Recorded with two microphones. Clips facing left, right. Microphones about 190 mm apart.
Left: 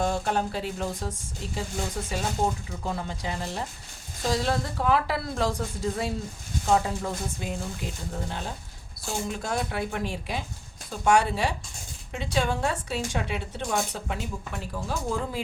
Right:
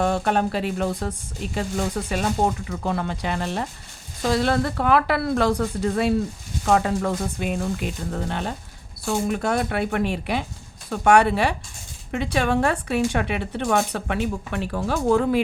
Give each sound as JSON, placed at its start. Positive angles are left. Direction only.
{"t": 0.0, "sound": "a woman's voice", "side_deg": -65}